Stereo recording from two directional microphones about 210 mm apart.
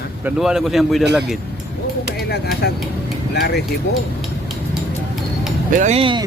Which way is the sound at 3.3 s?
50° left (ahead or behind).